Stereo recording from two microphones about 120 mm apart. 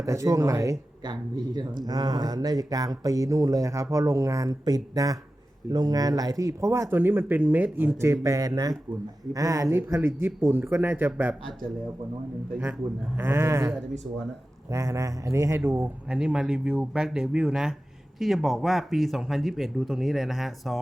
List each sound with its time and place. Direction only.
0.0 s speech: 25° right (ahead or behind)
13.1 s speech: 20° right (ahead or behind)
16.0 s speech: 5° right (ahead or behind)